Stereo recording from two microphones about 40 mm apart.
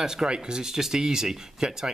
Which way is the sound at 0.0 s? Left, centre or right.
Centre.